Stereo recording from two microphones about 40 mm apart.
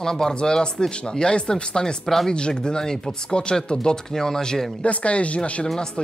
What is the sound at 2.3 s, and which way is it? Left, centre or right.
Speech, left.